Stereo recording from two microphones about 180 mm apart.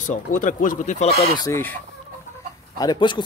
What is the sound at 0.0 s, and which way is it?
Speech, 45° left (ahead or behind).